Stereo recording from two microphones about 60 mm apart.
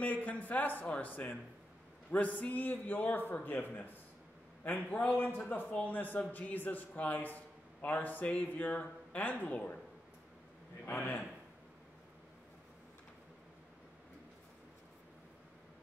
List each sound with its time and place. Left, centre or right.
0.0 s a man's voice: left